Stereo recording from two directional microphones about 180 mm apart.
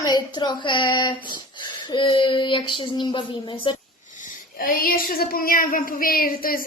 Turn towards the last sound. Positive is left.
turn(degrees=55)  # may be behind; listen again after turning